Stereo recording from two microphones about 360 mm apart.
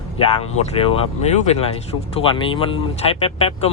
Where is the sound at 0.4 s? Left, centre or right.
Centre.